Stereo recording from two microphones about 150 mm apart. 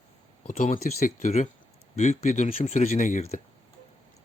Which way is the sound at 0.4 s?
55° left (ahead or behind).